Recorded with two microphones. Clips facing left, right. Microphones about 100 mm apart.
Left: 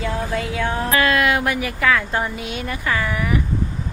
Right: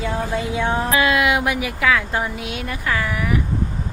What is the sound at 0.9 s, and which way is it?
A woman's voice, 15° right (ahead or behind).